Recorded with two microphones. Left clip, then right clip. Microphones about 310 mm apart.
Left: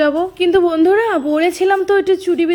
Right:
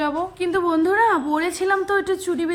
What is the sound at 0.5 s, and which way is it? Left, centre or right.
Speech, centre.